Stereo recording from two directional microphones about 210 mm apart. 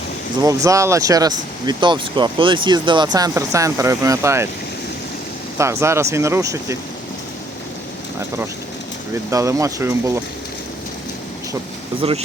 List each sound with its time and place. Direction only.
0.4 s speech: 15° right (ahead or behind)
5.5 s speech: 15° right (ahead or behind)
9.3 s speech: 15° right (ahead or behind)
12.0 s speech: 25° right (ahead or behind)